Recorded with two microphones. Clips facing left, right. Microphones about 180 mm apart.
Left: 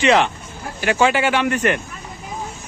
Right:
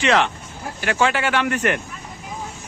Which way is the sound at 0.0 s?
5° left (ahead or behind).